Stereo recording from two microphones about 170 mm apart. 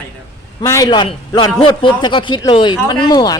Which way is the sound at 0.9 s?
25° left (ahead or behind).